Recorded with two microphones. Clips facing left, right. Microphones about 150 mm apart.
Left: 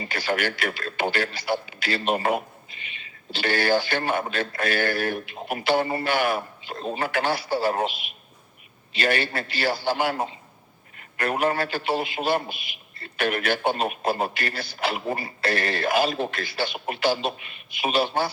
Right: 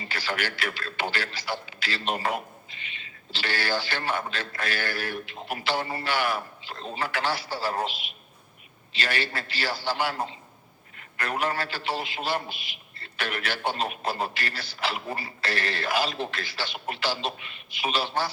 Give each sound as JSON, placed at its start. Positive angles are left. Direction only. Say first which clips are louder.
{"t": 0.1, "sound": "a man's voice", "louder": "left 5 dB", "side_deg": 50}
{"t": 9.0, "sound": "a man's voice", "louder": "left 6 dB", "side_deg": 50}
{"t": 11.2, "sound": "a man's voice", "louder": "left 5 dB", "side_deg": 50}